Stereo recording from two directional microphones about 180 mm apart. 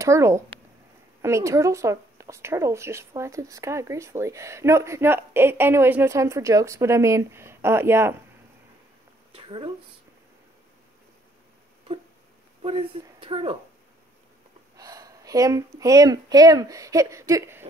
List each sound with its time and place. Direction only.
0.0 s speech: 15° right (ahead or behind)
9.3 s a sound: 30° right (ahead or behind)
12.6 s speech: 30° right (ahead or behind)
14.8 s speech: 20° right (ahead or behind)